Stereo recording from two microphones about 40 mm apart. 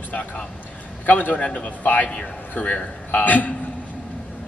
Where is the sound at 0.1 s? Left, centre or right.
Left.